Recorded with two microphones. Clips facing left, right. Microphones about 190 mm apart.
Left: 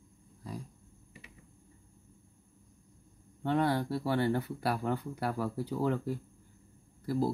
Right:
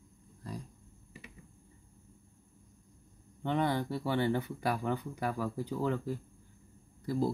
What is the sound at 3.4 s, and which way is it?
Speech, 5° left (ahead or behind).